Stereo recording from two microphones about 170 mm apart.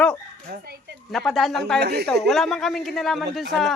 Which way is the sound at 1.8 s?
70° right (ahead or behind).